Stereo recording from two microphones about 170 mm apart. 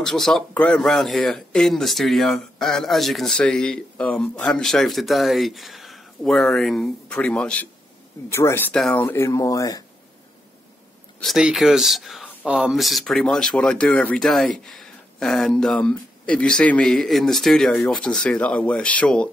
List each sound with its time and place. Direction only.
0.0 s speech: centre (ahead or behind); by 9.8 s 20° left (ahead or behind)
11.1 s speech: centre (ahead or behind)